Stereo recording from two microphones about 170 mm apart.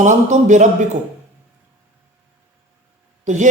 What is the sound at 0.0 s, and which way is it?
Speech, 45° right (ahead or behind).